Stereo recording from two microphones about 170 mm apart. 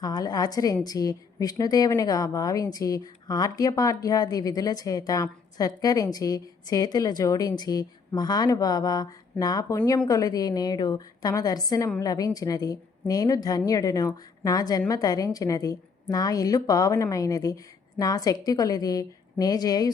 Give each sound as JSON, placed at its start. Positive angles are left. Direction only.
{"t": 0.0, "sound": "a woman's voice", "side_deg": 20}